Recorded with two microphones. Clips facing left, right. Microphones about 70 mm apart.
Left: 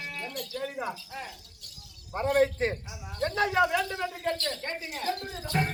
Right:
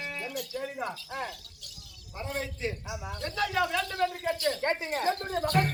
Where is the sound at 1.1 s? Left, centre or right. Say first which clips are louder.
Right 4 dB; right.